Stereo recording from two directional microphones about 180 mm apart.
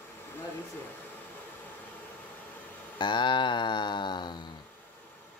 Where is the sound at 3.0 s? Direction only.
25° left (ahead or behind).